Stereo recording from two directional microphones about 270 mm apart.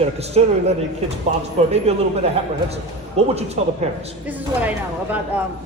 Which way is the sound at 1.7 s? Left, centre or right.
Right.